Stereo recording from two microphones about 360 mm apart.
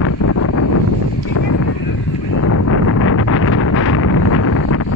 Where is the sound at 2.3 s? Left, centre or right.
Left.